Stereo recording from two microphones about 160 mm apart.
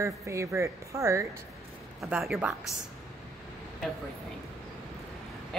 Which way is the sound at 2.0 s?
5° right (ahead or behind).